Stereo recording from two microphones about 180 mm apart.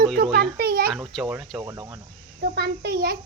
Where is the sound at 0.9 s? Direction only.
5° right (ahead or behind).